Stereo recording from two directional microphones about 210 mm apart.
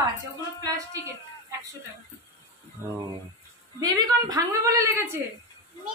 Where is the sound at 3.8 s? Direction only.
20° right (ahead or behind).